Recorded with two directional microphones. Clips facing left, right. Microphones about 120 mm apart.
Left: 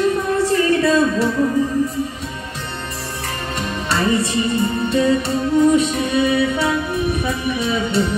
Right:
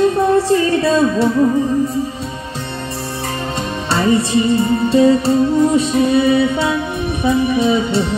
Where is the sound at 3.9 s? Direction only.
30° right (ahead or behind).